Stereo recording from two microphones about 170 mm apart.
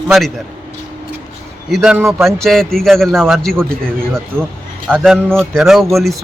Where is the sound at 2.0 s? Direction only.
15° right (ahead or behind).